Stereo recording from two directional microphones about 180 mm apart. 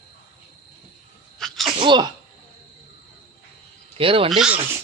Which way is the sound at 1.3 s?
Centre (ahead or behind).